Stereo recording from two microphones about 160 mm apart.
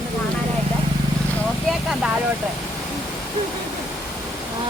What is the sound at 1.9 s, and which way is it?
Speech, 5° right (ahead or behind).